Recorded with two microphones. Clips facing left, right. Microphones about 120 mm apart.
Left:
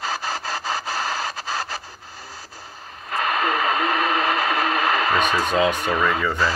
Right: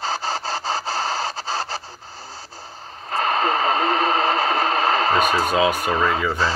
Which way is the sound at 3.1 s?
35° right (ahead or behind).